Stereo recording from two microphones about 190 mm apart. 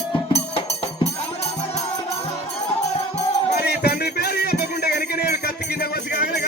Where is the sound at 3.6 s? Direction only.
60° left (ahead or behind).